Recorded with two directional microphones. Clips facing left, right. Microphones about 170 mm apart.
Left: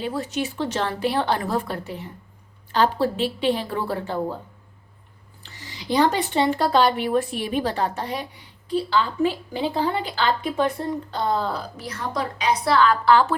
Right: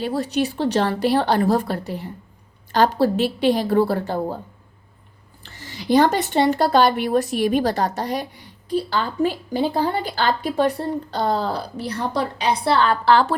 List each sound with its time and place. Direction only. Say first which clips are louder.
0.1 s speech: right 5 dB; 35° right (ahead or behind)
3.5 s speech: right 7 dB; 40° right (ahead or behind)
5.4 s speech: right 4 dB; 50° right (ahead or behind); by 13.3 s 35° right (ahead or behind)